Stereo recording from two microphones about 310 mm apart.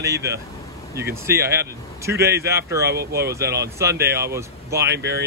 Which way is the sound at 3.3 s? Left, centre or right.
Centre.